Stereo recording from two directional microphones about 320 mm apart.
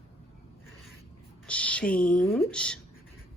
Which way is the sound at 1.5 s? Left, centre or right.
Centre.